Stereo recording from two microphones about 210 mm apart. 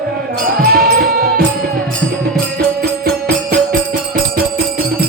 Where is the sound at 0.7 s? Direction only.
45° right (ahead or behind).